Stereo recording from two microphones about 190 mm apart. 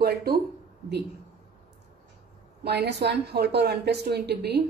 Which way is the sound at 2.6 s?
60° right (ahead or behind).